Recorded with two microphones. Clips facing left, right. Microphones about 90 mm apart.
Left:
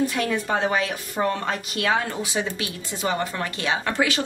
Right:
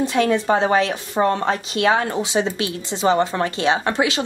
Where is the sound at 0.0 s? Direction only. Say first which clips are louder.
Right 5 dB; 25° right (ahead or behind).